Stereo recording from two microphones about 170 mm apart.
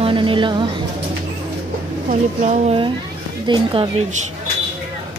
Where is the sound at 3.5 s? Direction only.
30° right (ahead or behind).